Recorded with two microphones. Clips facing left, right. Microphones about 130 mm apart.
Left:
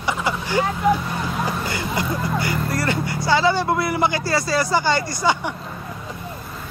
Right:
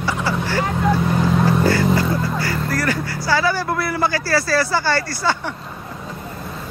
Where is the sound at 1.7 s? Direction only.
20° left (ahead or behind).